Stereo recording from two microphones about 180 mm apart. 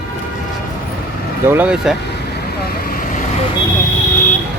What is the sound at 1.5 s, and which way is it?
Speech, 10° right (ahead or behind).